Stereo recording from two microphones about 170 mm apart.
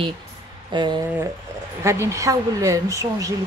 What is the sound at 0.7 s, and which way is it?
Speech, 25° right (ahead or behind).